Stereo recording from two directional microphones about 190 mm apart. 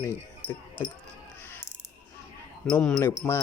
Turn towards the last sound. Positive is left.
turn(degrees=10)  # may be behind; listen again after turning